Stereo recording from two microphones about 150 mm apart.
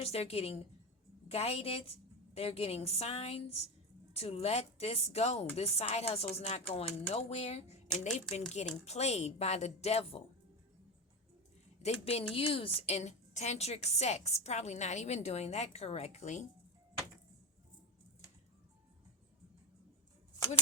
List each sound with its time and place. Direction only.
0.0 s a woman's voice: 40° left (ahead or behind)
7.9 s speech: 5° left (ahead or behind)
8.1 s a woman's voice: 50° left (ahead or behind)
11.8 s a woman's voice: 45° left (ahead or behind)